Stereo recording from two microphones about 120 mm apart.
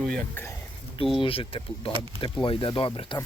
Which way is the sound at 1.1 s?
50° left (ahead or behind).